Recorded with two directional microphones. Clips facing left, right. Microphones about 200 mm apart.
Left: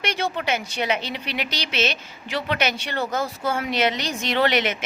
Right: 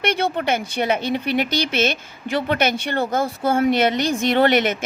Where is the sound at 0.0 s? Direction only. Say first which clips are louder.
Right 5 dB; 55° right (ahead or behind).